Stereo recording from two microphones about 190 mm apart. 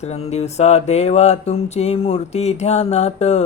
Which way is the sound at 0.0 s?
35° left (ahead or behind).